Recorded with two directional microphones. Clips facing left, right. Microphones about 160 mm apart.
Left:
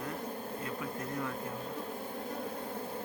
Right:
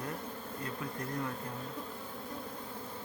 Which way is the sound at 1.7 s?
35° left (ahead or behind).